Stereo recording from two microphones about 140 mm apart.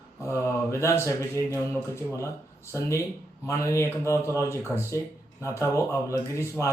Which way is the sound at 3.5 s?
20° left (ahead or behind).